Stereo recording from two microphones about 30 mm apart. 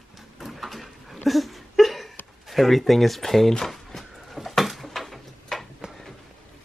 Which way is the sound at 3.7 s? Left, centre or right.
Centre.